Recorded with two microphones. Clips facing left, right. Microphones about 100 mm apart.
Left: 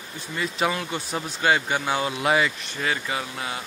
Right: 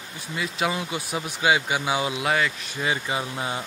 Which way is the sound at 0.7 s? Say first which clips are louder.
Even; 15° right (ahead or behind).